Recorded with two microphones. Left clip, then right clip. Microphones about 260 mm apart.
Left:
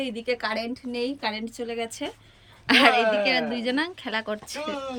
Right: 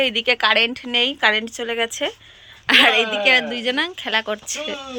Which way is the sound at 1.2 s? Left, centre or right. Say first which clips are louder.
Right 12 dB; centre.